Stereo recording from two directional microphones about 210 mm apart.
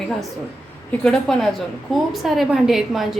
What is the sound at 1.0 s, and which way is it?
A woman's voice, 5° left (ahead or behind).